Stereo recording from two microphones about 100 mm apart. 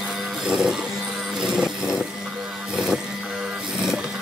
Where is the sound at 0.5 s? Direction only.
5° right (ahead or behind).